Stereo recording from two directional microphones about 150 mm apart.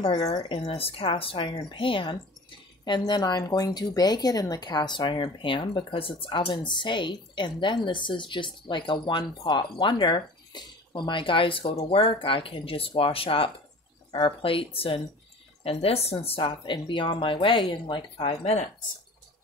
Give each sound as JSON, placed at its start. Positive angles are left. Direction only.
{"t": 0.0, "sound": "speech", "side_deg": 30}
{"t": 0.5, "sound": "a woman's voice", "side_deg": 40}